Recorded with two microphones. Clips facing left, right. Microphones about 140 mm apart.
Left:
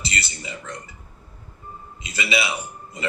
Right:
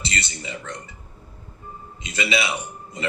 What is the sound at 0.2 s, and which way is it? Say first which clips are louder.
Speech: right 1 dB; 5° left (ahead or behind).